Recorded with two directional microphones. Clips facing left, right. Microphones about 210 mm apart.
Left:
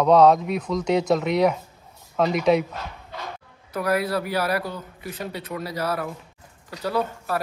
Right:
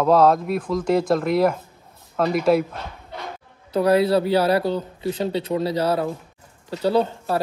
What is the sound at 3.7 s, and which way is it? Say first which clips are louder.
Speech: right 7 dB; 25° right (ahead or behind).